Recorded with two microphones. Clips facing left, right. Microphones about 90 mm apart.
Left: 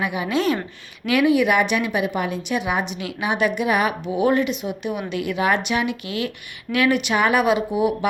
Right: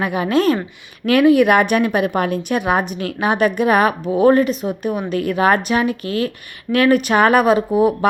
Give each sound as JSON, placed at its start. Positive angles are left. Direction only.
{"t": 0.0, "sound": "a woman's voice", "side_deg": -50}